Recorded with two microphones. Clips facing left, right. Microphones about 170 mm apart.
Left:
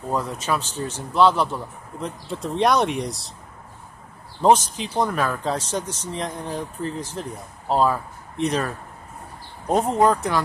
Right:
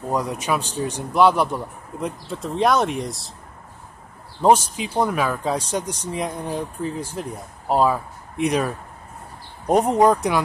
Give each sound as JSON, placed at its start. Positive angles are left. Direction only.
{"t": 0.1, "sound": "speech", "side_deg": -15}
{"t": 2.2, "sound": "speech", "side_deg": 0}
{"t": 4.4, "sound": "speech", "side_deg": -10}